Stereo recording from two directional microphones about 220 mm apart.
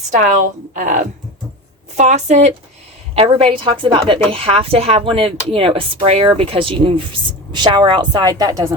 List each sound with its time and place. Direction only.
0.1 s a woman's voice: 35° right (ahead or behind); by 8.6 s 15° right (ahead or behind)